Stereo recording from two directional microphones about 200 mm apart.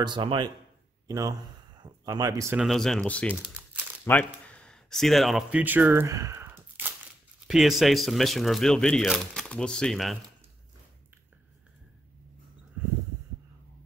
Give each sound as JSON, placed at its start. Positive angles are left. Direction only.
{"t": 0.0, "sound": "a man's voice", "side_deg": -25}
{"t": 2.5, "sound": "speech", "side_deg": 0}
{"t": 7.4, "sound": "speech", "side_deg": 0}